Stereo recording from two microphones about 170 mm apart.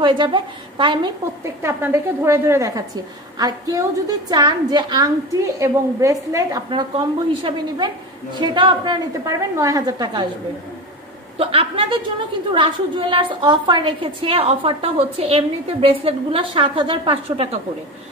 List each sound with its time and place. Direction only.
0.0 s a woman's voice: 30° right (ahead or behind)
1.4 s a woman's voice: 15° right (ahead or behind)
11.3 s a woman's voice: 30° right (ahead or behind)